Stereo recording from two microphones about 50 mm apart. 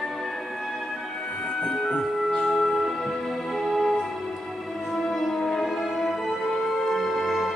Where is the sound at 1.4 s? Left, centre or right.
Centre.